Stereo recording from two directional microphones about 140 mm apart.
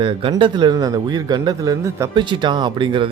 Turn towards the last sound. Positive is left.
turn(degrees=-35)  # may be behind; listen again after turning